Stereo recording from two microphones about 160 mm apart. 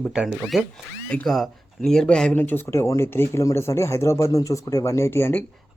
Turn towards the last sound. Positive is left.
turn(degrees=15)  # may be behind; listen again after turning